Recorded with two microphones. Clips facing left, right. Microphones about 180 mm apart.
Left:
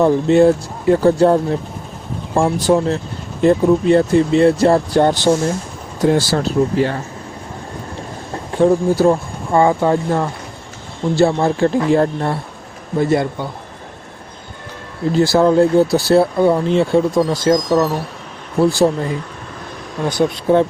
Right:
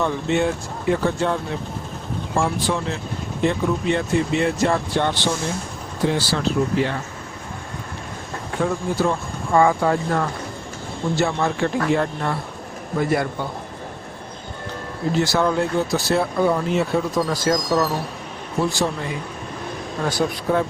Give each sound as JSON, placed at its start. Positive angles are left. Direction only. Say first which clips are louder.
{"t": 0.0, "sound": "speech", "louder": "left 10 dB", "side_deg": 35}
{"t": 8.5, "sound": "speech", "louder": "left 9 dB", "side_deg": 30}
{"t": 15.1, "sound": "speech", "louder": "left 8 dB", "side_deg": 35}
{"t": 18.6, "sound": "speech", "louder": "left 9 dB", "side_deg": 35}